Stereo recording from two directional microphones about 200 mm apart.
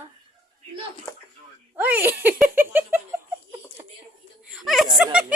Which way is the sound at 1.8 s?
10° right (ahead or behind).